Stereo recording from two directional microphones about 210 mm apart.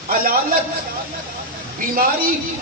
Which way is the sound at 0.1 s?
45° right (ahead or behind).